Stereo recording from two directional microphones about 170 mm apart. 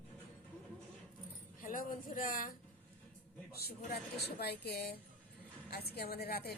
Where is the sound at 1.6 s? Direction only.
55° left (ahead or behind).